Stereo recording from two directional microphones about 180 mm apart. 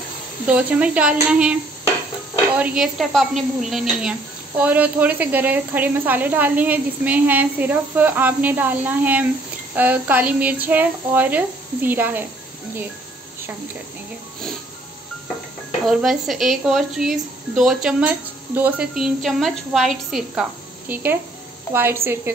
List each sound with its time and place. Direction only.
0.5 s speech: 10° right (ahead or behind)
15.8 s a woman's voice: centre (ahead or behind)